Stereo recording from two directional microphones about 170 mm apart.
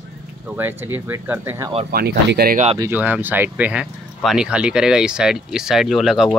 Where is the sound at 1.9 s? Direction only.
75° right (ahead or behind).